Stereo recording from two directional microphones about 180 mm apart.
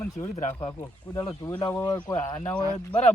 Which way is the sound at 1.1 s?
20° left (ahead or behind).